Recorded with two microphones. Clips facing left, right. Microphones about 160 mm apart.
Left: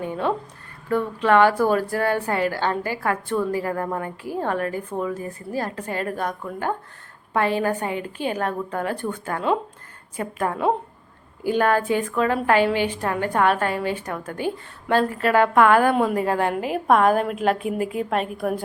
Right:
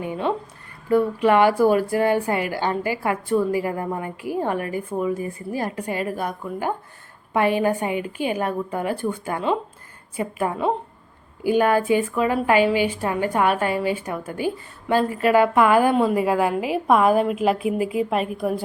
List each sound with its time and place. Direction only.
0.0 s a woman's voice: 10° right (ahead or behind)